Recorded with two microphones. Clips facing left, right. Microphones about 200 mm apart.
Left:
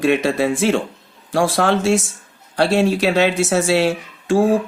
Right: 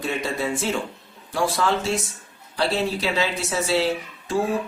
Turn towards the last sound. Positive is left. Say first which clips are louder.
# left 7 dB
turn(degrees=80)